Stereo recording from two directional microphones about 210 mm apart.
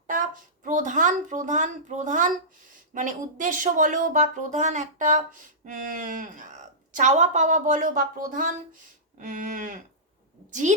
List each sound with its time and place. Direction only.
0.1 s speech: 40° right (ahead or behind)